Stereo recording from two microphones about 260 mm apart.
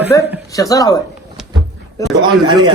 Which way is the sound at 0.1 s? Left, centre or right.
Centre.